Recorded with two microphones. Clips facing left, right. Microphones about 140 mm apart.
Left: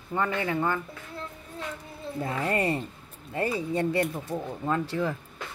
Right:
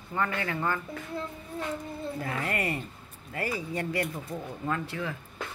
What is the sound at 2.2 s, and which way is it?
Speech, 25° left (ahead or behind).